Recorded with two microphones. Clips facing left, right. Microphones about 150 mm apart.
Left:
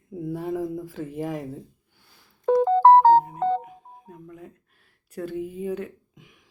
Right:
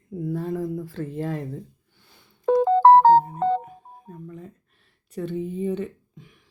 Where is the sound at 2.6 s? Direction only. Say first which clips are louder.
Right 1 dB; 85° right.